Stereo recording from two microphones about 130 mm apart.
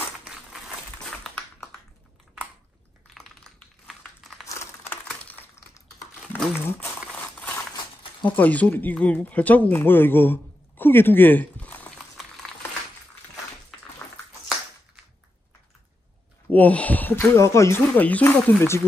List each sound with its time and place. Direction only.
0.2 s a sound: 5° right (ahead or behind)
3.2 s crumpling: 5° left (ahead or behind)
4.5 s crumpling: 20° left (ahead or behind)
5.0 s a sound: 10° left (ahead or behind)
6.5 s crumpling: 15° left (ahead or behind)
8.4 s speech: 10° left (ahead or behind)
16.5 s speech: 10° left (ahead or behind)